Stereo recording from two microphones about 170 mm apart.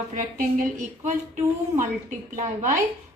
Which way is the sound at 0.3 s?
50° right (ahead or behind).